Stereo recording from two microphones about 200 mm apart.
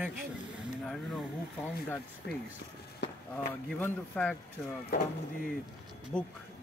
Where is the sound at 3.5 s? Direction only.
10° left (ahead or behind).